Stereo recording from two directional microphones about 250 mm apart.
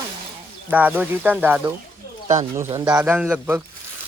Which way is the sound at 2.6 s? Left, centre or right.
Centre.